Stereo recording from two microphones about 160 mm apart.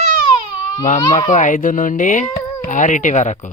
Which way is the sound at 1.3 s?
55° left (ahead or behind).